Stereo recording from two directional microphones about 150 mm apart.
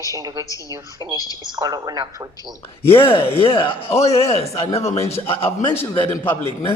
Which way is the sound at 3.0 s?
35° left (ahead or behind).